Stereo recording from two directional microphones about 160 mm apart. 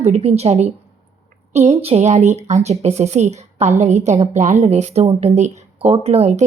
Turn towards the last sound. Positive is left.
turn(degrees=-45)  # may be behind; listen again after turning